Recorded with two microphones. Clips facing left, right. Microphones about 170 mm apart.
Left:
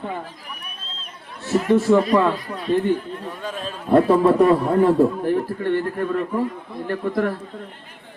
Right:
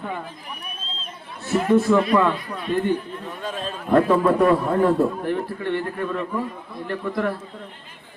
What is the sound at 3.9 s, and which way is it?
Speech, 30° left (ahead or behind).